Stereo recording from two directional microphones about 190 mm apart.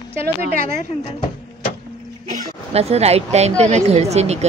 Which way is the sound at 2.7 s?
35° right (ahead or behind).